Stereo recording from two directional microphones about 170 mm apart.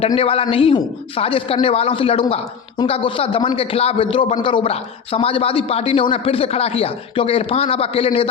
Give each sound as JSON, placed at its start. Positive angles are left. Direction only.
{"t": 0.2, "sound": "a man's voice", "side_deg": 35}